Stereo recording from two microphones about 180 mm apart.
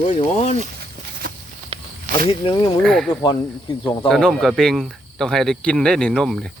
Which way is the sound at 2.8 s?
5° left (ahead or behind).